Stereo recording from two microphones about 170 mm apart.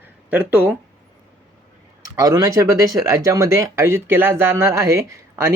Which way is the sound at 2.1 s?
20° right (ahead or behind).